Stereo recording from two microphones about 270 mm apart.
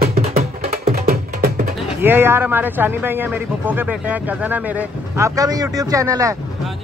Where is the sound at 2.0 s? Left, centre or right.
Centre.